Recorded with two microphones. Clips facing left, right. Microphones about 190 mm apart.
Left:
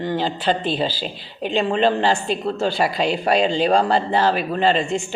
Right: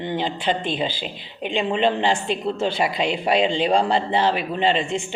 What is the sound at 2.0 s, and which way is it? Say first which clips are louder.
A man's voice: left 1 dB; 20° right (ahead or behind).